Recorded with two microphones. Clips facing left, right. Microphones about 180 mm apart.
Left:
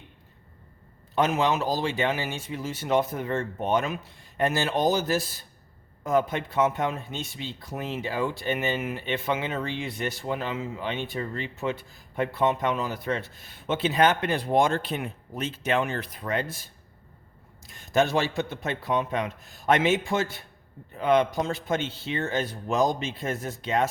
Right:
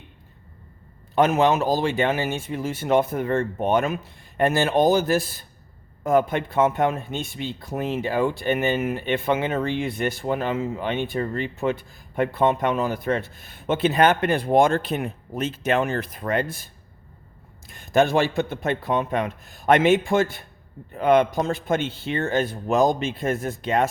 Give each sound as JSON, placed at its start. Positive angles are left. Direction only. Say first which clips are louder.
{"t": 1.1, "sound": "a man's voice", "louder": "right 5 dB", "side_deg": -55}
{"t": 17.7, "sound": "a man's voice", "louder": "right 4 dB", "side_deg": -55}